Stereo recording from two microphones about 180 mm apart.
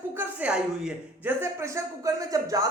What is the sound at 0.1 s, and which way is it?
Speech, 10° right (ahead or behind).